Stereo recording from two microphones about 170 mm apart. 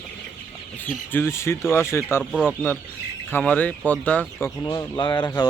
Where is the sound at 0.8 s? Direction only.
10° left (ahead or behind).